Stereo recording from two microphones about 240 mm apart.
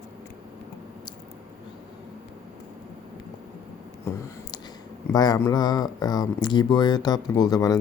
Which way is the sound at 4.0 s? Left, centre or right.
Centre.